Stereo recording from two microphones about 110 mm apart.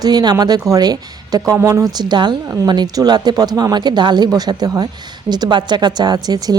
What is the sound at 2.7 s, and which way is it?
Speech, 40° right (ahead or behind).